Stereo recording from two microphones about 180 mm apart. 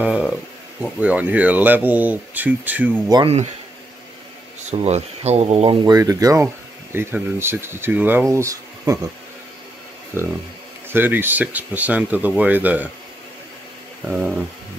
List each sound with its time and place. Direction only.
0.0 s a sound: 5° right (ahead or behind)
1.0 s speech: 10° right (ahead or behind)
3.1 s speech: 25° right (ahead or behind)
4.6 s speech: 35° right (ahead or behind)
5.9 s speech: 20° right (ahead or behind)
10.1 s speech: 10° right (ahead or behind)
14.0 s speech: 5° right (ahead or behind)